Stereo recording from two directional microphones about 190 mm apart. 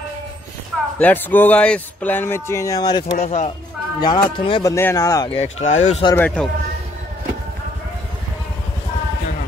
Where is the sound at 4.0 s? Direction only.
20° left (ahead or behind).